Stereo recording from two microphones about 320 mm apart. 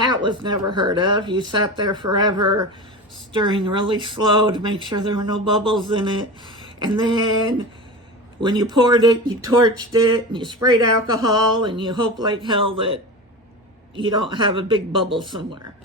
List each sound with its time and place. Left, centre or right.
0.0 s speech: centre